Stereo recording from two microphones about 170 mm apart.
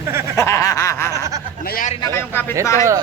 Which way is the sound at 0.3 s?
20° left (ahead or behind).